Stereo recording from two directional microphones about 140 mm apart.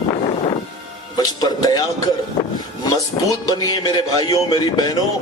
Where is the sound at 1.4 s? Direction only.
30° left (ahead or behind).